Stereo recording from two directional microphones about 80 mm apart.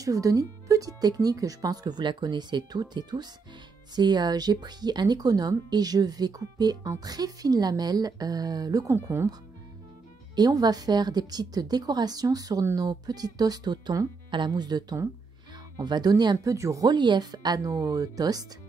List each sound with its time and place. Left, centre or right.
0.0 s speech: right
10.3 s speech: right
14.3 s speech: right
16.5 s speech: right
16.8 s speech: right